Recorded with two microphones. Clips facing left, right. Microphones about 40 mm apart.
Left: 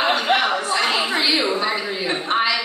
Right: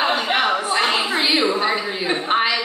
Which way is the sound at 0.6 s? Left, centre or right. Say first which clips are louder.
Right 1 dB; centre.